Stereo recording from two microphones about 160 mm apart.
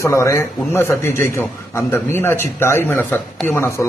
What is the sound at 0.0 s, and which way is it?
A man's voice, 20° left (ahead or behind).